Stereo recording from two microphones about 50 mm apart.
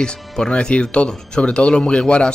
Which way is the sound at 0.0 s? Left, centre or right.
Centre.